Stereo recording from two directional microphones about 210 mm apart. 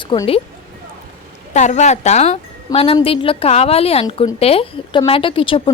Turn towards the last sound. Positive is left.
turn(degrees=25)  # may be behind; listen again after turning